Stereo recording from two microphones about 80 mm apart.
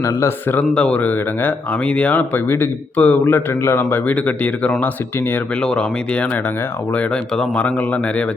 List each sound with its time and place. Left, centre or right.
0.0 s speech: left
0.5 s speech: centre